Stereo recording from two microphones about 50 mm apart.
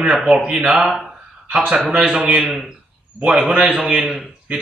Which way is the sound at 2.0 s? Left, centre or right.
Centre.